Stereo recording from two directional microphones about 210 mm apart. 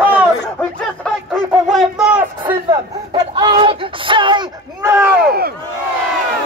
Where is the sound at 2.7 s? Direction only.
20° right (ahead or behind).